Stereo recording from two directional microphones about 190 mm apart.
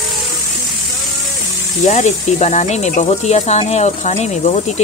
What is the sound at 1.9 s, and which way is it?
Speech, 40° left (ahead or behind).